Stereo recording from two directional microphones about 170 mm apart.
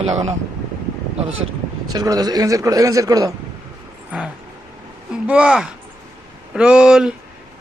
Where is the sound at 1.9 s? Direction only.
25° right (ahead or behind).